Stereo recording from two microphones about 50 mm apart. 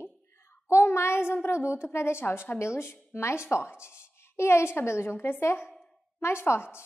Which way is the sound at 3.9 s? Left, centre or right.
Left.